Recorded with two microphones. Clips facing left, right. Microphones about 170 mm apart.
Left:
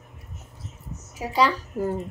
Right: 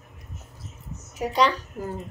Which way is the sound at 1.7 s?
35° left (ahead or behind).